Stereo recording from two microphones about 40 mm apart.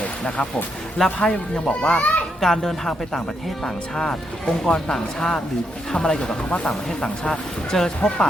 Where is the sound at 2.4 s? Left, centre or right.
Centre.